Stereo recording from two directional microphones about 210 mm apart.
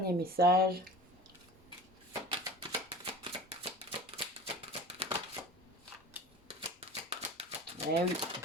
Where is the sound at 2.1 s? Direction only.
20° right (ahead or behind).